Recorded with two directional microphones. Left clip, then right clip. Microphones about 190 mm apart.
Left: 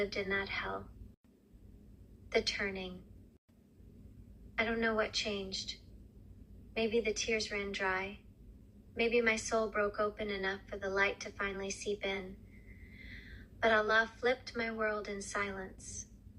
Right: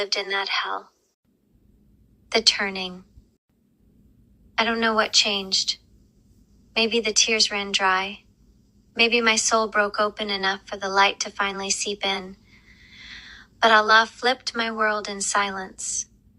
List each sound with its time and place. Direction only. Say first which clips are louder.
0.0 s a woman's voice: right 10 dB; 30° right (ahead or behind)
2.3 s a woman's voice: right 13 dB; 35° right (ahead or behind)
4.5 s a woman's voice: right 12 dB; 35° right (ahead or behind)